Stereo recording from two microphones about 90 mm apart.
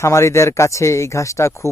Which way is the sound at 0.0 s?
35° left (ahead or behind).